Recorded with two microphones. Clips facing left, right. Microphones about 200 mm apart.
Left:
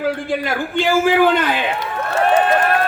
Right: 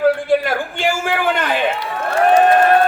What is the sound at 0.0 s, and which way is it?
A man's voice, 50° right (ahead or behind).